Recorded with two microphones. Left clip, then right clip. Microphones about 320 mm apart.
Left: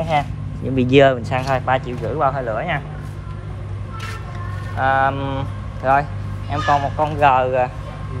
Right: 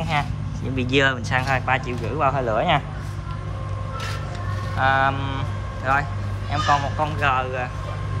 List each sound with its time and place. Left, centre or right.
0.7 s speech: centre
4.7 s speech: centre